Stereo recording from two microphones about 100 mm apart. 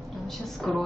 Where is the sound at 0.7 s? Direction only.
5° left (ahead or behind).